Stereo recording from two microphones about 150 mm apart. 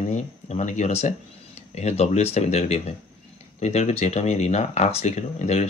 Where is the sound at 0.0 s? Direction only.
50° left (ahead or behind).